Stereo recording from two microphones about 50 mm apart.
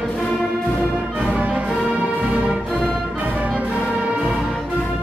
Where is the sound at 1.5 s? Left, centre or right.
Right.